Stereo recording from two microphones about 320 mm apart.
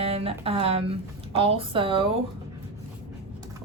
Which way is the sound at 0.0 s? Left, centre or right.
Centre.